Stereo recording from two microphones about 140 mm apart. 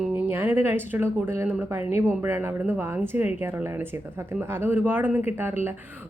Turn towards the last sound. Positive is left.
turn(degrees=-15)  # may be behind; listen again after turning